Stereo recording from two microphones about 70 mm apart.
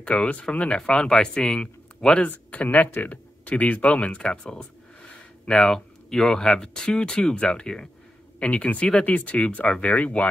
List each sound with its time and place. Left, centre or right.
0.0 s speech: centre
2.2 s speech: left